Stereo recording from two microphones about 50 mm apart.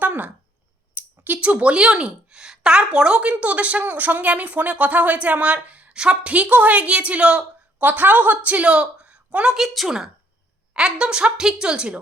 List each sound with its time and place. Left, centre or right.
0.0 s a sound: right
0.9 s speech: right
7.8 s a woman's voice: right
8.4 s a woman's voice: right
9.6 s a woman's voice: centre
10.8 s a woman's voice: centre